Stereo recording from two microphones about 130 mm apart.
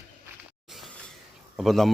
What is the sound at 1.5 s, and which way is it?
Speech, centre (ahead or behind).